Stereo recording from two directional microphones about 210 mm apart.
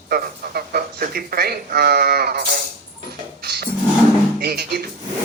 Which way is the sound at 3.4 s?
50° right (ahead or behind).